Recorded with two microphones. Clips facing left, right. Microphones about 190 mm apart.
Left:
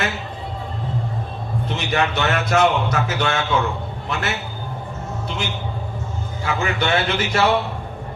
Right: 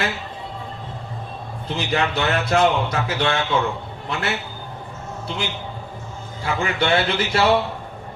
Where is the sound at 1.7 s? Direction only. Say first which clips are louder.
Even; 30° right (ahead or behind).